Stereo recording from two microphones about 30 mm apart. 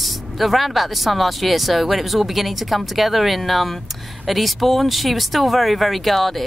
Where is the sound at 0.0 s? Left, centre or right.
Centre.